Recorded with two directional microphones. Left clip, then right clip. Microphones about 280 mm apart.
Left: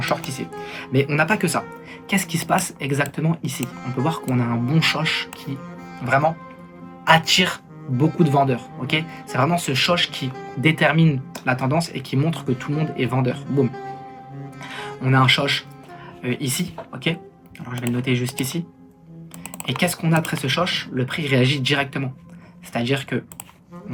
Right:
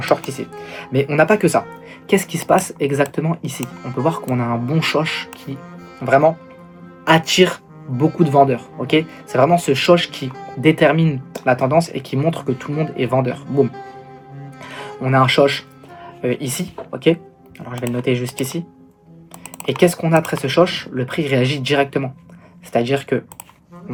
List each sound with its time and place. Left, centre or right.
0.0 s speech: centre
7.9 s speech: centre